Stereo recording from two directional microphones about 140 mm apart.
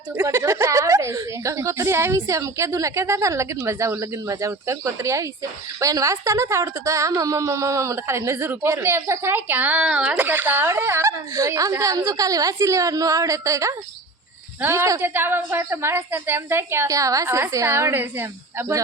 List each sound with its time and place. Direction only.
0.2 s a woman's voice: 20° right (ahead or behind)